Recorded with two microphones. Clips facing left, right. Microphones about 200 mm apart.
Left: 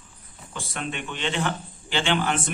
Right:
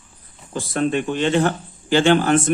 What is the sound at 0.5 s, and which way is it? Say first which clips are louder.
A man's voice: right 12 dB; 40° right (ahead or behind).